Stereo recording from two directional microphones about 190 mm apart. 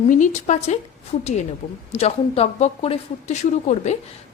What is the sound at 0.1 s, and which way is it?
Speech, 40° left (ahead or behind).